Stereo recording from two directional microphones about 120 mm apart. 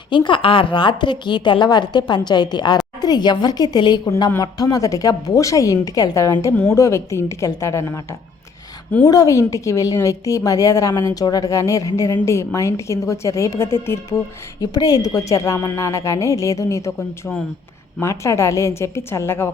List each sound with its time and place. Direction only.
0.1 s a woman's voice: 45° left (ahead or behind); by 8.0 s 25° left (ahead or behind)
9.0 s a woman's voice: 30° left (ahead or behind)
14.6 s a woman's voice: 30° left (ahead or behind)